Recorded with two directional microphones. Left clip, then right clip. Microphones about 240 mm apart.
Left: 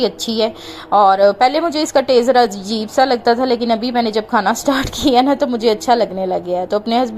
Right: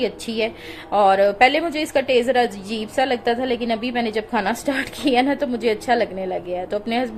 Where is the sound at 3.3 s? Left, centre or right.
Left.